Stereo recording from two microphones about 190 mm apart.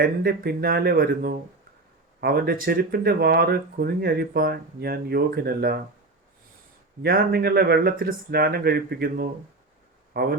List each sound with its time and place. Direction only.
0.0 s speech: 55° right (ahead or behind)
7.0 s speech: 55° right (ahead or behind)